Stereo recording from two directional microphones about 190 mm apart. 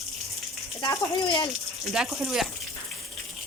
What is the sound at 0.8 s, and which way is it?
Speech, 25° left (ahead or behind).